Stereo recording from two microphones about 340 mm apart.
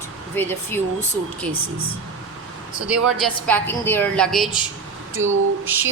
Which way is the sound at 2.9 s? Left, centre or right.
Centre.